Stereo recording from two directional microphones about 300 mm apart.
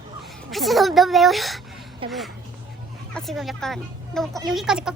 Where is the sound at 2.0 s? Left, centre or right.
Centre.